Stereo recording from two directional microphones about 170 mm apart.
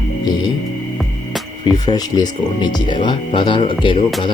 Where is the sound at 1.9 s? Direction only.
25° left (ahead or behind).